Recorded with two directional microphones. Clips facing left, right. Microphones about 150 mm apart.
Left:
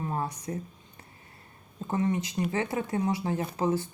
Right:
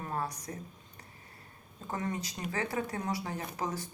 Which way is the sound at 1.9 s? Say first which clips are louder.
Left 7 dB; 25° left (ahead or behind).